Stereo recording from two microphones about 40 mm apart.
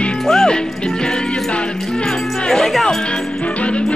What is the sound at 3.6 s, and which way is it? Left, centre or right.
Music, left.